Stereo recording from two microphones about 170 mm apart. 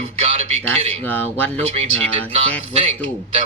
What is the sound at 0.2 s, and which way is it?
Speech, 35° right (ahead or behind).